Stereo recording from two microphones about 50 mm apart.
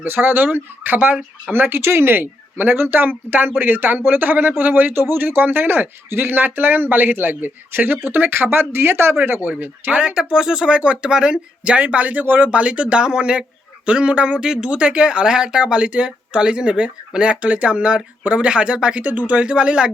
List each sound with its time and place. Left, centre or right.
0.0 s speech: right
1.5 s speech: right
9.4 s speech: right
10.2 s speech: centre; by 12.5 s right
12.5 s speech: right
19.1 s speech: right
19.4 s speech: centre